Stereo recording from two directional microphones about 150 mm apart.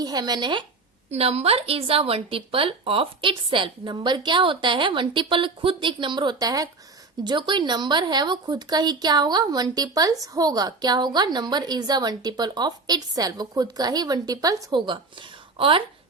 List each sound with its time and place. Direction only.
0.0 s speech: 25° right (ahead or behind)
1.1 s speech: 45° right (ahead or behind)